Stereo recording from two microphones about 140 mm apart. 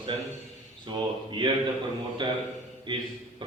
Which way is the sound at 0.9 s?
35° right (ahead or behind).